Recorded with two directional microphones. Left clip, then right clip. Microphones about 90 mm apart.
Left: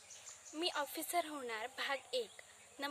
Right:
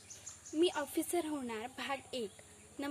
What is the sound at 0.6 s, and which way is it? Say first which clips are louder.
A woman's voice: right 6 dB; 45° left (ahead or behind).